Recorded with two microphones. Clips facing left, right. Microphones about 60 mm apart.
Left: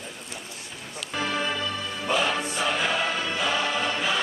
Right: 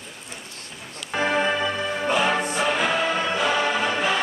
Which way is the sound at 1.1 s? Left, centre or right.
Right.